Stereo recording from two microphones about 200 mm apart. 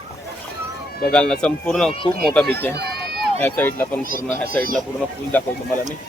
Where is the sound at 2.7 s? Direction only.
55° right (ahead or behind).